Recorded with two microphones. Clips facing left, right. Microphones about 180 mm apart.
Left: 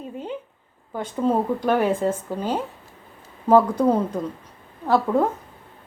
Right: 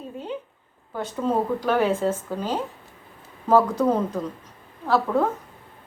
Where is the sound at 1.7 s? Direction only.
10° left (ahead or behind).